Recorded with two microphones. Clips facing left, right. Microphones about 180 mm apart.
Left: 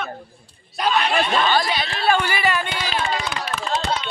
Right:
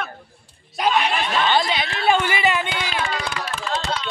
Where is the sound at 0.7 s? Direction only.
15° right (ahead or behind).